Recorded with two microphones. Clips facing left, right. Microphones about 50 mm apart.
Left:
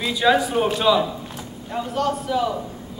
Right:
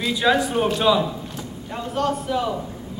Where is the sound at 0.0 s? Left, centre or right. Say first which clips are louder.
Left 1 dB; centre.